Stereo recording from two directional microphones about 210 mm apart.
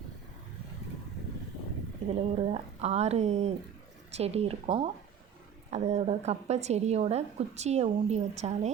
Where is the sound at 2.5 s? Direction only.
30° right (ahead or behind).